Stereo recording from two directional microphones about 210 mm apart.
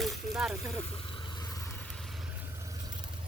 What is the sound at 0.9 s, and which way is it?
Vehicle, 25° left (ahead or behind).